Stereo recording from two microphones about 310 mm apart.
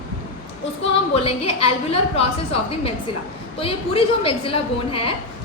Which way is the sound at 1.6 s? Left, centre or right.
Centre.